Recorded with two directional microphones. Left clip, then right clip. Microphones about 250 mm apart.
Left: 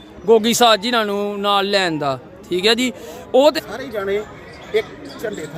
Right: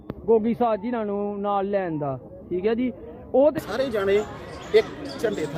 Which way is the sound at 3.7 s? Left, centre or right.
Centre.